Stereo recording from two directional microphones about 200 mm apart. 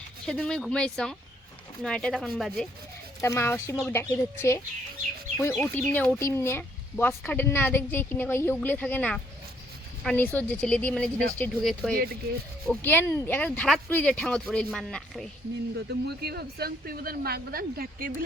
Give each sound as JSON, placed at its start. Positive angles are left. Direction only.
{"t": 0.3, "sound": "speech", "side_deg": 5}
{"t": 3.2, "sound": "a woman's voice", "side_deg": 15}
{"t": 15.9, "sound": "speech", "side_deg": -55}